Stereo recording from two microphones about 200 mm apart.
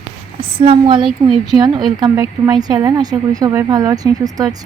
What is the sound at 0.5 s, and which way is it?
A woman's voice, 25° right (ahead or behind).